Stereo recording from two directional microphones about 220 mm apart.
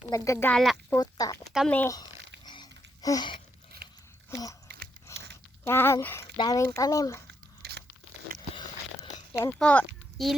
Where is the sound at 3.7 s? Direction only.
45° right (ahead or behind).